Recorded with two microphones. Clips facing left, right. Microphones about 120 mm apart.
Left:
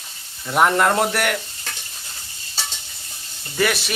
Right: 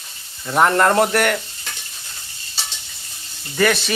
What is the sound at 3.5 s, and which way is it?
Speech, 5° left (ahead or behind).